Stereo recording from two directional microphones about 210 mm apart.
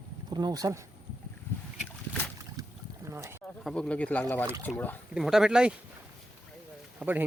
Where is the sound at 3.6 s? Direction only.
5° left (ahead or behind).